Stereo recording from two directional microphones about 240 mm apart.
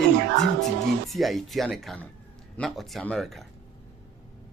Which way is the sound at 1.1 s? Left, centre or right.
Centre.